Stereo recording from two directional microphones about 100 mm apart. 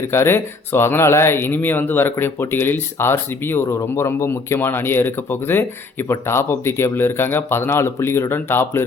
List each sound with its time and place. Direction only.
0.1 s speech: 25° left (ahead or behind)